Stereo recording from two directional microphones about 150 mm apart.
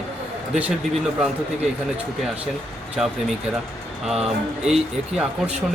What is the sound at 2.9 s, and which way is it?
Speech, centre (ahead or behind).